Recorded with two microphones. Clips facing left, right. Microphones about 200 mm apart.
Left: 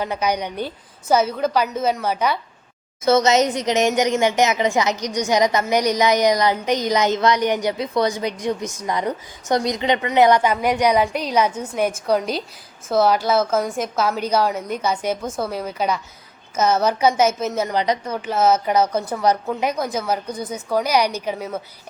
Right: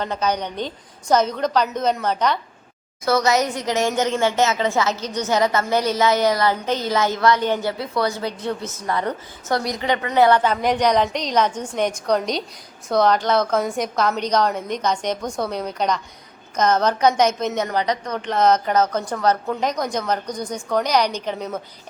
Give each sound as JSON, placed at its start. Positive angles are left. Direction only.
{"t": 0.0, "sound": "a woman's voice", "side_deg": 10}
{"t": 3.0, "sound": "a woman's voice", "side_deg": 20}